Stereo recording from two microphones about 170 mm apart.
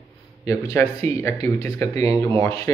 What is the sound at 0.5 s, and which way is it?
Speech, 20° left (ahead or behind).